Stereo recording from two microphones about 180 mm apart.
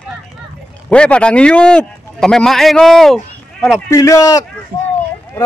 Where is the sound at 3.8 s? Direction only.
15° left (ahead or behind).